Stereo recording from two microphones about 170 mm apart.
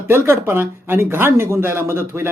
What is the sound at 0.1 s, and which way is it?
Speech, 15° right (ahead or behind).